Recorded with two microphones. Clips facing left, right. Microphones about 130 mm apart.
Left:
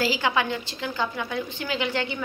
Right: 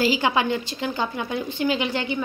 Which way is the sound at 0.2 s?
20° right (ahead or behind).